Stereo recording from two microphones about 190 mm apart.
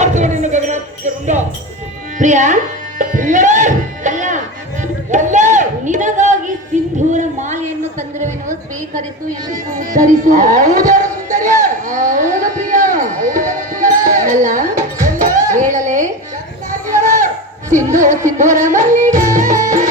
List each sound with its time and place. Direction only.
0.0 s a sound: 40° right (ahead or behind)
2.1 s speech: 40° right (ahead or behind)
3.0 s music: 45° right (ahead or behind)
7.1 s speech: 40° right (ahead or behind)
9.7 s music: 45° right (ahead or behind)
11.4 s a sound: 40° right (ahead or behind)
15.4 s dishes: 40° right (ahead or behind)
16.7 s a sound: 40° right (ahead or behind)
17.9 s speech: 40° right (ahead or behind)
19.5 s music: 40° right (ahead or behind)